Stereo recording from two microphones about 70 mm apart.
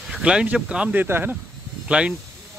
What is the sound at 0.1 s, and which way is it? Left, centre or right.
Speech, centre.